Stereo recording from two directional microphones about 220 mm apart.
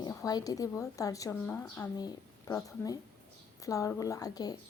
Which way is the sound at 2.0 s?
20° left (ahead or behind).